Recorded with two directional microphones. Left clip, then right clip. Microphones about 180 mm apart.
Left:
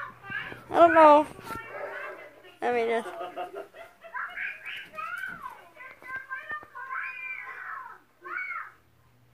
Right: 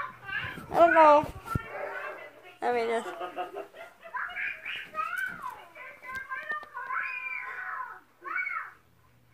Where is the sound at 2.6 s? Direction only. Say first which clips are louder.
Left 2 dB; 20° left (ahead or behind).